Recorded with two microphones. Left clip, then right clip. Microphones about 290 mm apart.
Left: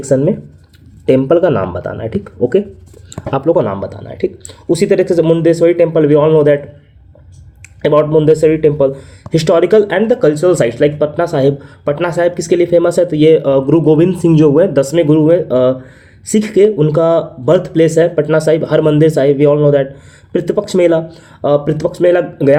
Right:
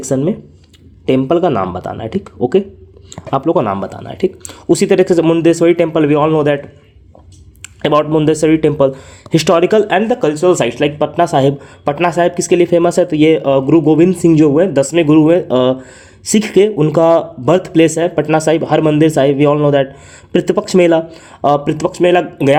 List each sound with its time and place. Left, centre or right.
0.0 s speech: centre
7.6 s speech: right